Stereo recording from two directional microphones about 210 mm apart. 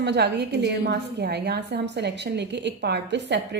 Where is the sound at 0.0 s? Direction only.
55° right (ahead or behind).